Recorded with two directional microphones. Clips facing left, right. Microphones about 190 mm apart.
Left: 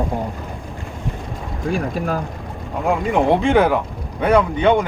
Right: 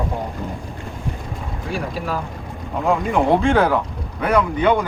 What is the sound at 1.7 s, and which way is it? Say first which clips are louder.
Speech: left 4 dB; 50° left (ahead or behind).